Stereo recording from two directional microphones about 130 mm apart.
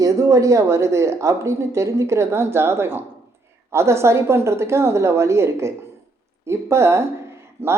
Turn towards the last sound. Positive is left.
turn(degrees=-50)  # may be behind; listen again after turning